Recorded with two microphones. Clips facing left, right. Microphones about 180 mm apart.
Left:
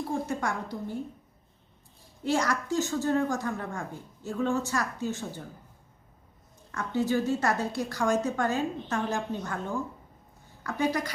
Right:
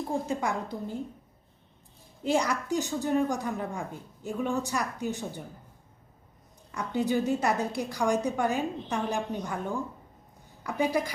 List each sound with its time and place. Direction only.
0.1 s a woman's voice: 15° right (ahead or behind)
2.2 s a woman's voice: 15° right (ahead or behind)
6.7 s a woman's voice: 15° right (ahead or behind)
10.6 s a woman's voice: 15° right (ahead or behind)